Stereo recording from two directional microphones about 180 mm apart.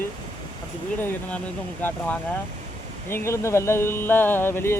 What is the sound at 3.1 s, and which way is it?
Speech, 15° left (ahead or behind).